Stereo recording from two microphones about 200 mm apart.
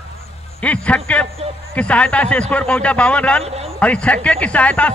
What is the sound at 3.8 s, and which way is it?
Speech, 5° left (ahead or behind).